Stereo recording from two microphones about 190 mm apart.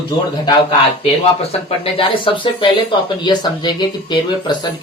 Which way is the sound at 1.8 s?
30° left (ahead or behind).